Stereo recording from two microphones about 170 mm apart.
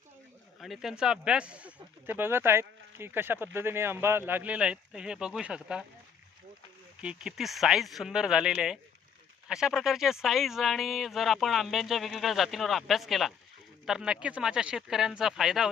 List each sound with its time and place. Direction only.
0.6 s speech: centre (ahead or behind)
7.0 s speech: 5° right (ahead or behind)